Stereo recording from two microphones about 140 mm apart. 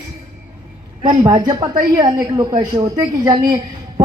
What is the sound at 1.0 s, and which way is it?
A woman's voice, 30° right (ahead or behind).